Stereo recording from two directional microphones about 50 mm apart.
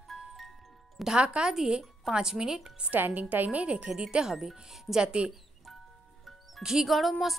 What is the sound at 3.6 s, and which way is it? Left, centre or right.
Speech, right.